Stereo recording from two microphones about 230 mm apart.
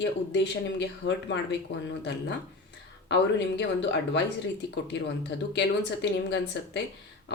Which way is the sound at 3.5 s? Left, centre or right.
Left.